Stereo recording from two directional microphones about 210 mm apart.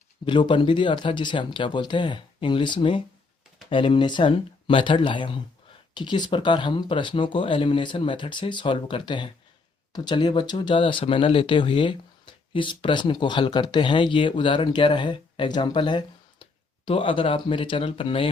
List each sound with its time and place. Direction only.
0.3 s speech: 25° left (ahead or behind)